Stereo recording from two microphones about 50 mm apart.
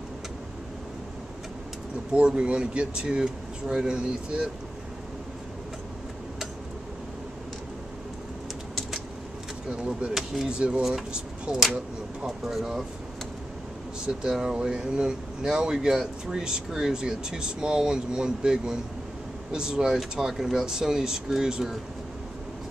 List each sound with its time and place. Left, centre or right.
2.1 s speech: right
9.7 s speech: right
10.1 s speech: centre
12.3 s speech: centre
14.0 s speech: centre